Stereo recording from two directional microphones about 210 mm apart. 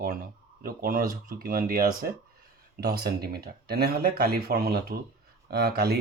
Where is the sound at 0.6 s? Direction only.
45° right (ahead or behind).